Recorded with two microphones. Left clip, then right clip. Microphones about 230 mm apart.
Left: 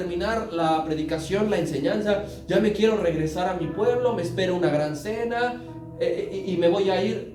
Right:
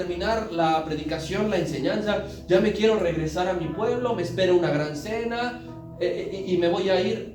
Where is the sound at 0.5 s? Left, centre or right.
Left.